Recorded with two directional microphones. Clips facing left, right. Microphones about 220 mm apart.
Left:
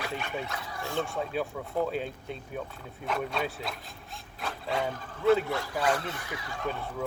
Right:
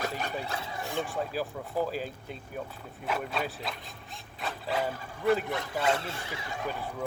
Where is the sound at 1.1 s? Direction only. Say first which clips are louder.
Left 1 dB; 5° right (ahead or behind).